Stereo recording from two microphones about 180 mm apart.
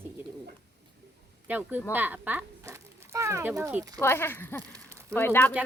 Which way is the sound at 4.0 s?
15° left (ahead or behind).